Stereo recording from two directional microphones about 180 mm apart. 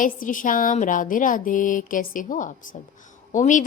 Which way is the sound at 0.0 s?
50° left (ahead or behind).